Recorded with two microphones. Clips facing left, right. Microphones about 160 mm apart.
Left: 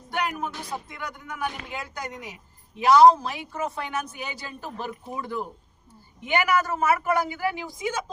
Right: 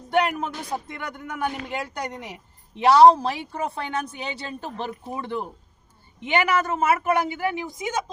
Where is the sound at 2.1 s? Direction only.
30° right (ahead or behind).